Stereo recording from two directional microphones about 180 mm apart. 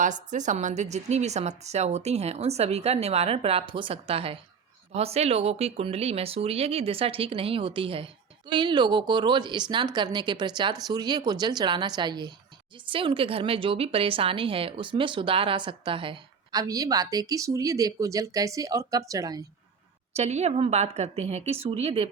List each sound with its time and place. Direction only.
0.0 s a woman's voice: 45° right (ahead or behind); by 19.5 s 20° right (ahead or behind)
20.1 s speech: 35° right (ahead or behind)